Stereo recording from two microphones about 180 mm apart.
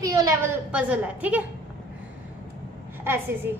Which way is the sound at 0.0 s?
20° right (ahead or behind).